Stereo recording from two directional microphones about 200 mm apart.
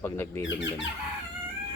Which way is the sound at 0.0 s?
15° left (ahead or behind).